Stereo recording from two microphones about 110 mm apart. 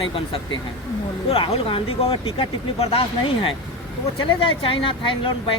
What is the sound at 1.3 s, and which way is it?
Speech, 55° left (ahead or behind).